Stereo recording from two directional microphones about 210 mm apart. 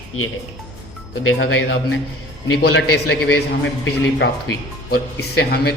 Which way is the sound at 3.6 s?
60° left (ahead or behind).